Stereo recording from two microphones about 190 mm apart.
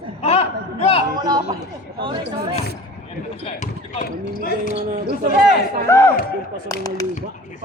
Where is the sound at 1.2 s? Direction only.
20° right (ahead or behind).